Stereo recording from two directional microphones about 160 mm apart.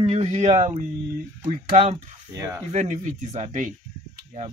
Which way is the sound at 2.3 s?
20° right (ahead or behind).